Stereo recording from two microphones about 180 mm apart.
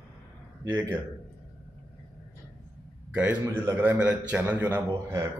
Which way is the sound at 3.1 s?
10° right (ahead or behind).